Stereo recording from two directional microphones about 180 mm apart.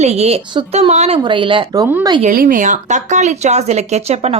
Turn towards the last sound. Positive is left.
turn(degrees=-35)  # may be behind; listen again after turning